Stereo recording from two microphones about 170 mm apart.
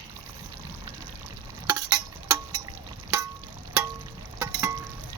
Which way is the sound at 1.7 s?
20° right (ahead or behind).